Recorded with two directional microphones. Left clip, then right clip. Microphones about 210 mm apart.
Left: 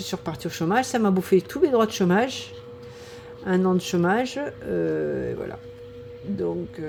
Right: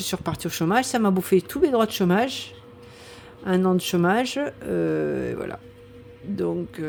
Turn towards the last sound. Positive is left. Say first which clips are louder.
# right 1 dB
turn(degrees=-20)  # may be behind; listen again after turning